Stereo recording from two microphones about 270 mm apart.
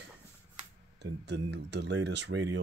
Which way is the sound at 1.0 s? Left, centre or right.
Right.